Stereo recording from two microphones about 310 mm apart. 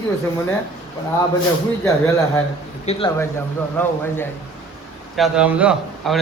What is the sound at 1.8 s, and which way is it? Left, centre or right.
A man's voice, centre.